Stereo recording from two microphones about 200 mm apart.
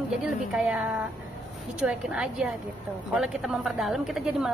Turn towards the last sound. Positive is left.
turn(degrees=0)  # may be behind; listen again after turning